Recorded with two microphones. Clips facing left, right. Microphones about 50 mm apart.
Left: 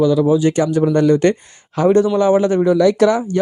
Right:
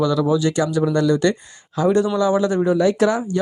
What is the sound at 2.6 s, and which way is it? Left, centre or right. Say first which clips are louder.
Speech: left 4 dB; left.